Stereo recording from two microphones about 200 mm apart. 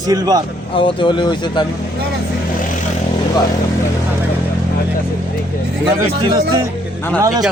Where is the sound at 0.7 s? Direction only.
25° left (ahead or behind).